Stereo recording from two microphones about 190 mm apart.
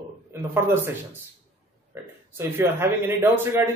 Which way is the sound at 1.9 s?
15° right (ahead or behind).